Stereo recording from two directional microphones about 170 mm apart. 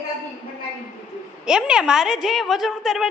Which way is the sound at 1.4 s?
5° right (ahead or behind).